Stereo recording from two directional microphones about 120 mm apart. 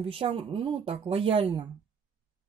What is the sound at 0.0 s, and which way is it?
Speech, 50° right (ahead or behind).